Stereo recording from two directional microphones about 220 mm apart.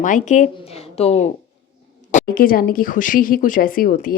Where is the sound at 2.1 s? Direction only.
40° left (ahead or behind).